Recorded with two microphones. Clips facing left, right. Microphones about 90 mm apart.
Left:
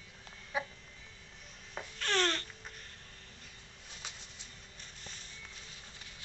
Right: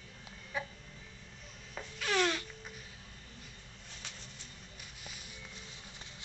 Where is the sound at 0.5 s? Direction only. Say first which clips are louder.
Left 2 dB; 15° left (ahead or behind).